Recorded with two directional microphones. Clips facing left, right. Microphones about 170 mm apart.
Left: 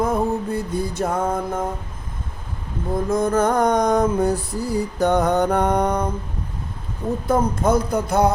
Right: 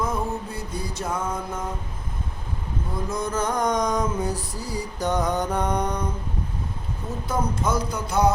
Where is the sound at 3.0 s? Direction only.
55° left (ahead or behind).